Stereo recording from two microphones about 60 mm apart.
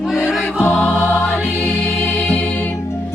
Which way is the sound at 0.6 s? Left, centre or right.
Left.